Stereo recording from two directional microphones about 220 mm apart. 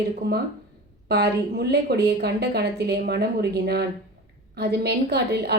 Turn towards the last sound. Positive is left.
turn(degrees=-45)  # may be behind; listen again after turning